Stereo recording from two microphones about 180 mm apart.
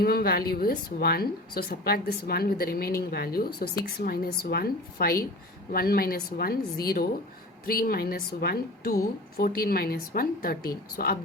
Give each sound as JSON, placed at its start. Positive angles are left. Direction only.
{"t": 0.0, "sound": "a woman's voice", "side_deg": 55}